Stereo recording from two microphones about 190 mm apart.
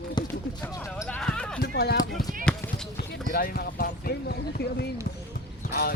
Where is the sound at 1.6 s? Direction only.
60° left (ahead or behind).